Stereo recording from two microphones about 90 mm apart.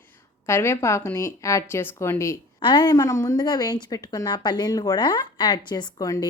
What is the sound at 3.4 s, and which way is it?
A woman's voice, 50° left (ahead or behind).